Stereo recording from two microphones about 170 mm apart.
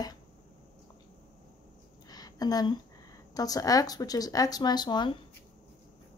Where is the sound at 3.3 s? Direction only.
20° left (ahead or behind).